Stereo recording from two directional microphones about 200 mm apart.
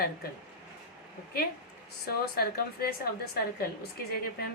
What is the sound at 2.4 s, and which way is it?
Speech, 50° left (ahead or behind).